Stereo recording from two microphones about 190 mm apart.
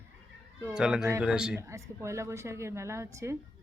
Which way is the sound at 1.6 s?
15° right (ahead or behind).